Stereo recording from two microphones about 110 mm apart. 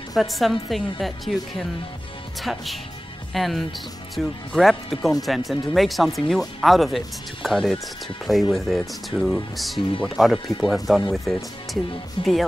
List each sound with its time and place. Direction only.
0.1 s speech: centre (ahead or behind)
12.2 s speech: 50° left (ahead or behind)